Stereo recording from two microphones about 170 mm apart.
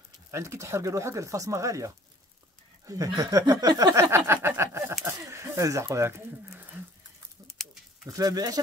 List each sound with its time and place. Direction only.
0.3 s speech: 15° right (ahead or behind)
5.0 s a sound: 15° right (ahead or behind)
7.4 s goat: centre (ahead or behind)
8.1 s speech: 20° right (ahead or behind)